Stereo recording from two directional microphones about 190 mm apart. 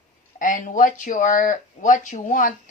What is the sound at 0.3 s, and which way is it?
Speech, 45° left (ahead or behind).